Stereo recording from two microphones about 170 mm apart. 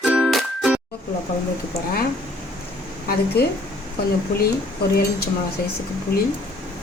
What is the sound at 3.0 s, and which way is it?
Speech, 70° left (ahead or behind).